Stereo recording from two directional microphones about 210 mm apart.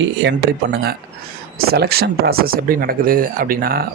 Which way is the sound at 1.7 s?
50° right (ahead or behind).